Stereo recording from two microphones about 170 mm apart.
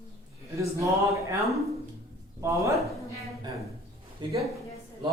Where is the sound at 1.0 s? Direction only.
15° right (ahead or behind).